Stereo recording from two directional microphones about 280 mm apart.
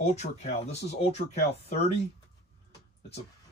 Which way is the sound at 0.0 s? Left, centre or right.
Left.